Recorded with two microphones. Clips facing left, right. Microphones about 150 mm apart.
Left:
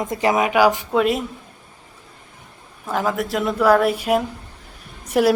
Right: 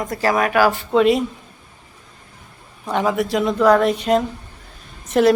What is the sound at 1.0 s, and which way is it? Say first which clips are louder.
Speech: right 6 dB; centre (ahead or behind).